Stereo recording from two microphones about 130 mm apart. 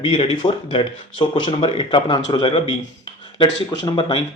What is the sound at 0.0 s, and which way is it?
Speech, 40° left (ahead or behind).